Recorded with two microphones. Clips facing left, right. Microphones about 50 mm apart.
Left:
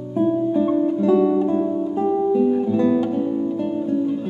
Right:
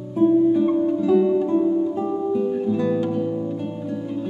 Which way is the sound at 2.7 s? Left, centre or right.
Centre.